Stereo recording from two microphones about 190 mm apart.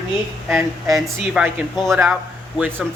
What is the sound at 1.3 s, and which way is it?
A man's voice, 5° right (ahead or behind).